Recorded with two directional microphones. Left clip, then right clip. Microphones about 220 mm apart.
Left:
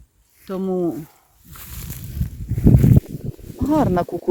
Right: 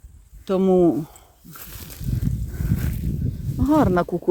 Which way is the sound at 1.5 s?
Centre (ahead or behind).